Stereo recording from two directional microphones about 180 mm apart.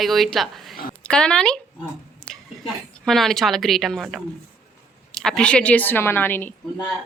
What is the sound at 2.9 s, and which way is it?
A woman's voice, centre (ahead or behind).